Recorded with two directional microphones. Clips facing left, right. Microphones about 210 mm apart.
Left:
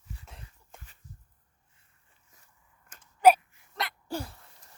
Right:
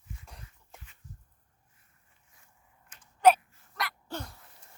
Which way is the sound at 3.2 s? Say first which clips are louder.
Left 2 dB; 10° left (ahead or behind).